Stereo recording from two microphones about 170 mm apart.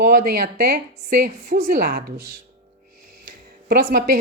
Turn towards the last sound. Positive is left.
turn(degrees=-55)  # may be behind; listen again after turning